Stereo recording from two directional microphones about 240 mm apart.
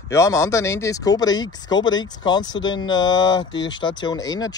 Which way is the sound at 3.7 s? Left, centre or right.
Centre.